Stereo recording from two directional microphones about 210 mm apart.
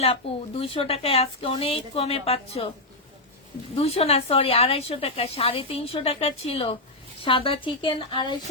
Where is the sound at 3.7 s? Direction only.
30° left (ahead or behind).